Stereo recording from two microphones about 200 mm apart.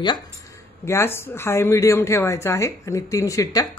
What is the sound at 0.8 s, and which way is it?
A woman's voice, 15° left (ahead or behind).